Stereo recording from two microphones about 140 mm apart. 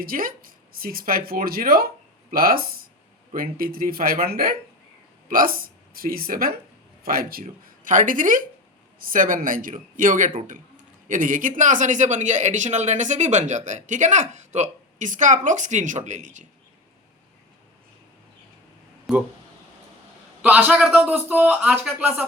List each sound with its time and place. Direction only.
0.0 s speech: 90° right; by 16.5 s 60° right (ahead or behind)
19.1 s speech: centre (ahead or behind)
20.4 s a man's voice: 10° right (ahead or behind)